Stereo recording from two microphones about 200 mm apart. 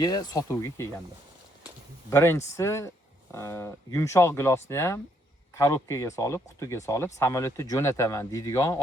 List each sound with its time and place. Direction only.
0.0 s speech: 20° left (ahead or behind)
2.0 s speech: 15° left (ahead or behind)